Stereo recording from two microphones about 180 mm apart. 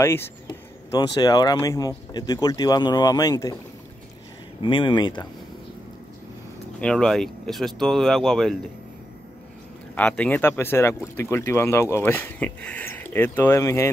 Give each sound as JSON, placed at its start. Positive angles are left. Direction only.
{"t": 0.0, "sound": "speech", "side_deg": 15}
{"t": 4.6, "sound": "speech", "side_deg": 25}
{"t": 6.8, "sound": "speech", "side_deg": 5}
{"t": 9.9, "sound": "speech", "side_deg": 5}